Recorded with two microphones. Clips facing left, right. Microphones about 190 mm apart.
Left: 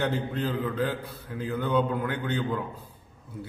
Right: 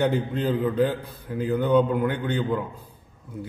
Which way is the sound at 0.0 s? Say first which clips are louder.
Right 5 dB; 15° right (ahead or behind).